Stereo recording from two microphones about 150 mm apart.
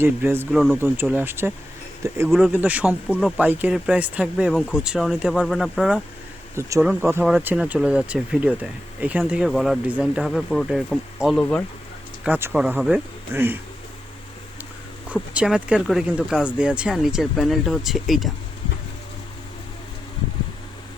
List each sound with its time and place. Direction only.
0.0 s speech: 15° right (ahead or behind)
0.5 s speech: centre (ahead or behind)
1.1 s speech: 15° right (ahead or behind)
3.1 s speech: 5° left (ahead or behind)
3.3 s speech: 10° right (ahead or behind)
6.6 s speech: 20° right (ahead or behind); by 11.3 s centre (ahead or behind)
11.3 s speech: 10° left (ahead or behind)
12.2 s speech: 10° right (ahead or behind)
15.1 s speech: 10° right (ahead or behind)